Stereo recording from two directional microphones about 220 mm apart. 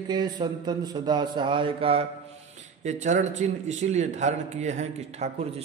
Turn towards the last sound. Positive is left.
turn(degrees=-30)  # may be behind; listen again after turning